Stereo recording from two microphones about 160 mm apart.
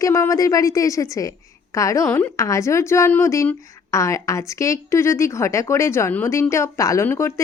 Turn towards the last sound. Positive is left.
turn(degrees=15)  # may be behind; listen again after turning